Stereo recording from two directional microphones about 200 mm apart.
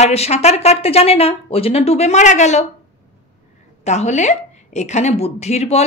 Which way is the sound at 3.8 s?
35° left (ahead or behind).